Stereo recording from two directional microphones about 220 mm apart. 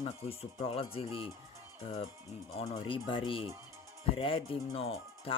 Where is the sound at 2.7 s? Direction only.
20° left (ahead or behind).